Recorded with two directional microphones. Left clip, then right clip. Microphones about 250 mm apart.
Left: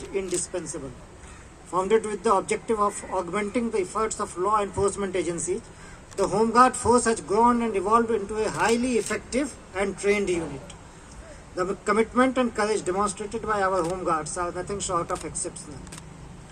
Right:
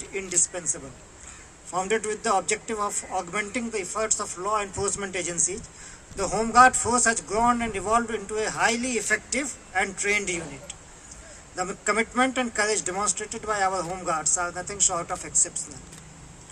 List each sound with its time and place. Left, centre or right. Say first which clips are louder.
0.1 s a man's voice: even; right
1.7 s a man's voice: left 3 dB; right
11.5 s a man's voice: left 2 dB; right